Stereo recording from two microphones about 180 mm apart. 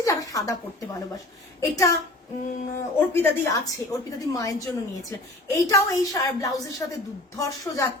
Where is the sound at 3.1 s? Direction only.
15° left (ahead or behind).